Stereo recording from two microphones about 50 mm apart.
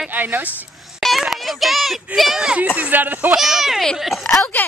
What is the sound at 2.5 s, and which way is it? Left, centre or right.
Speech, right.